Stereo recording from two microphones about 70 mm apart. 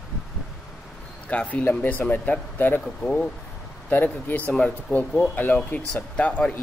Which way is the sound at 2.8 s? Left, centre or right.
Centre.